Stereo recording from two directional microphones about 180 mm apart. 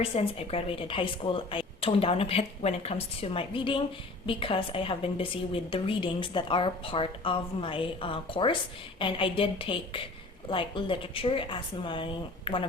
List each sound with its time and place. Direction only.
0.0 s a woman's voice: 35° left (ahead or behind)